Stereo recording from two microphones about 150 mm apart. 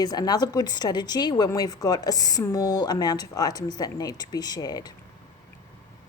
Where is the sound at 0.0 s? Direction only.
25° left (ahead or behind).